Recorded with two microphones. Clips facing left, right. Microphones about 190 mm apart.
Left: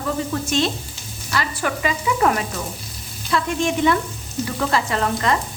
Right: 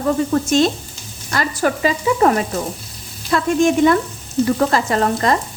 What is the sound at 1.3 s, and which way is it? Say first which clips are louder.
Frying: right 5 dB; 40° right (ahead or behind).